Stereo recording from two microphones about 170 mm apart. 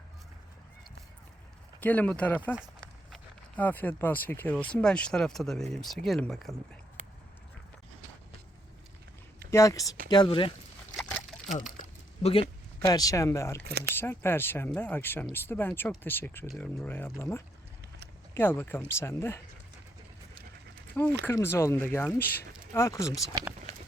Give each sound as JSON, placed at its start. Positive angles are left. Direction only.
{"t": 1.8, "sound": "speech", "side_deg": 10}
{"t": 2.6, "sound": "walk", "side_deg": 0}
{"t": 3.6, "sound": "speech", "side_deg": 10}
{"t": 9.5, "sound": "speech", "side_deg": 15}
{"t": 10.9, "sound": "slosh", "side_deg": 0}
{"t": 11.8, "sound": "a sound", "side_deg": 35}
{"t": 12.8, "sound": "speech", "side_deg": 20}
{"t": 13.7, "sound": "speech", "side_deg": -70}
{"t": 13.9, "sound": "speech", "side_deg": 15}
{"t": 20.9, "sound": "speech", "side_deg": 10}